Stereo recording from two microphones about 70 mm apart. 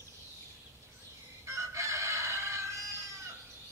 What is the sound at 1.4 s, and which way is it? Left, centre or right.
Chicken, right.